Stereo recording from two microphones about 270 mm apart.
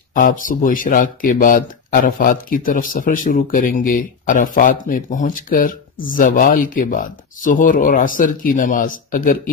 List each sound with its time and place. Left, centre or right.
0.1 s speech: left